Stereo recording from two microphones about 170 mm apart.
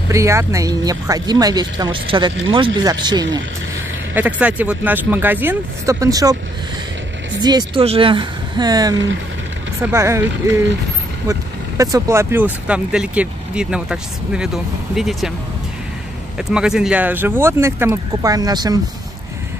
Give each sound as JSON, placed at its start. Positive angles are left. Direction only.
{"t": 0.1, "sound": "speech", "side_deg": -15}
{"t": 4.1, "sound": "speech", "side_deg": -10}
{"t": 7.4, "sound": "speech", "side_deg": -25}
{"t": 8.9, "sound": "speech", "side_deg": -90}
{"t": 9.9, "sound": "speech", "side_deg": -15}
{"t": 16.3, "sound": "speech", "side_deg": -5}